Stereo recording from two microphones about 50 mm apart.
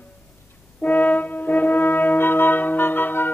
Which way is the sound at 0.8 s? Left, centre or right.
Left.